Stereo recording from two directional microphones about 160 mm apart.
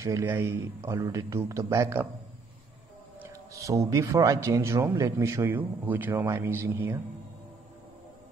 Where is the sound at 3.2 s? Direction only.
20° right (ahead or behind).